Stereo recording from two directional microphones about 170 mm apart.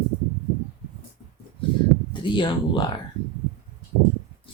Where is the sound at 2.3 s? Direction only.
30° left (ahead or behind).